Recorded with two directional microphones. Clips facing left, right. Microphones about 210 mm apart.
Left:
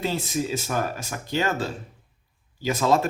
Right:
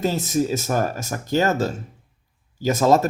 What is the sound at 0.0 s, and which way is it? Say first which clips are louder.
Speech: right 5 dB; 45° right (ahead or behind).